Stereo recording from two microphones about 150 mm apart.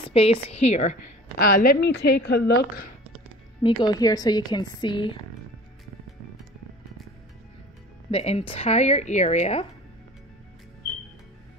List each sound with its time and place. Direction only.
0.1 s speech: 40° left (ahead or behind)
1.4 s a woman's voice: 75° left (ahead or behind)
3.6 s a woman's voice: 25° left (ahead or behind)
8.1 s speech: 45° left (ahead or behind)